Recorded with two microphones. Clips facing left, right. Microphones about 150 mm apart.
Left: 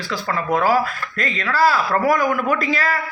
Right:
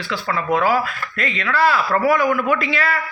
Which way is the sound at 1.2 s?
35° left (ahead or behind).